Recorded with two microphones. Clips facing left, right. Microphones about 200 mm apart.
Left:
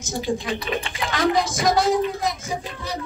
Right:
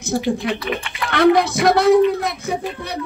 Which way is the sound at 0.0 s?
65° right (ahead or behind).